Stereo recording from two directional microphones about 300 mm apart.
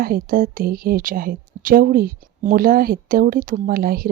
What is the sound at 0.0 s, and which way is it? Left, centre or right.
Speech, right.